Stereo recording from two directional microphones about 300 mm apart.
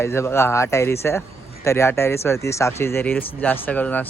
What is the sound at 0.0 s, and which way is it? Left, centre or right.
Speech, centre.